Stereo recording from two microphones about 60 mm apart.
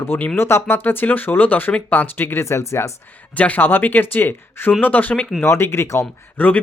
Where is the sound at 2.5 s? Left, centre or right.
Left.